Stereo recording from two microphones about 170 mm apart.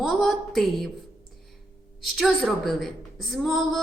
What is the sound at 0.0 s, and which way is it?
Speech, centre (ahead or behind).